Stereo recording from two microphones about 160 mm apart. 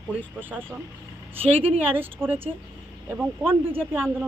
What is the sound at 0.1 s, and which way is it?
Speech, 10° right (ahead or behind).